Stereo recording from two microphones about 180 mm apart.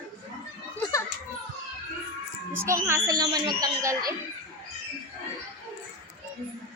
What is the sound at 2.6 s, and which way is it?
Speech, 15° right (ahead or behind).